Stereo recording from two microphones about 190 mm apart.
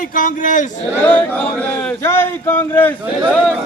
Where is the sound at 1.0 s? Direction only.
5° left (ahead or behind).